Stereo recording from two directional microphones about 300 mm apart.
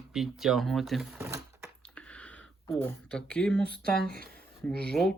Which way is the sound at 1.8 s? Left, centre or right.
Centre.